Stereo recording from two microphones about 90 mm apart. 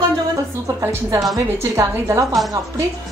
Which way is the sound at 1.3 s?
35° right (ahead or behind).